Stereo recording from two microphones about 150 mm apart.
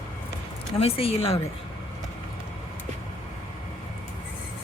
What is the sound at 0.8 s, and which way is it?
Speech, 40° left (ahead or behind).